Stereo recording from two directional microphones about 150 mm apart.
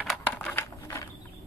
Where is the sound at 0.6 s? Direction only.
20° left (ahead or behind).